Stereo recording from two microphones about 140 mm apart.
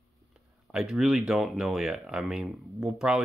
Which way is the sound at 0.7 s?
5° right (ahead or behind).